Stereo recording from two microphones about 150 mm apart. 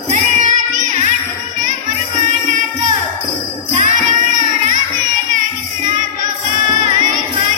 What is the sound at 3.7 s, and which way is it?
Jingle bell, 55° right (ahead or behind).